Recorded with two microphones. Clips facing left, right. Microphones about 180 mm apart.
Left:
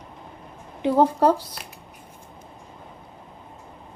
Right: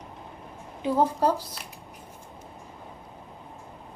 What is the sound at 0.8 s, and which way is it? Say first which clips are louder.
Speech: left 5 dB; 65° left (ahead or behind).